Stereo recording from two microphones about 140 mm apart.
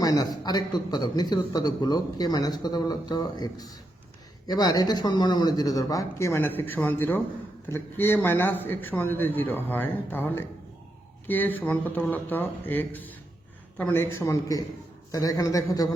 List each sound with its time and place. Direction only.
0.0 s a man's voice: 30° left (ahead or behind)